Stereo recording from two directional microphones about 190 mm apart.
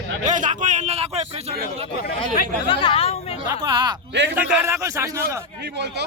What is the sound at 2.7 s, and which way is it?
Speech, 25° left (ahead or behind).